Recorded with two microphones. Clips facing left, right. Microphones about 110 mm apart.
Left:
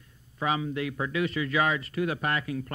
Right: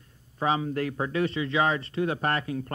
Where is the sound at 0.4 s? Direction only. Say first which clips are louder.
Right 2 dB; 35° right (ahead or behind).